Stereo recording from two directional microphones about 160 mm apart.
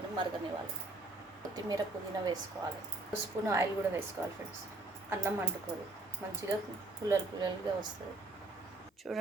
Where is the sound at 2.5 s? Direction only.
10° right (ahead or behind).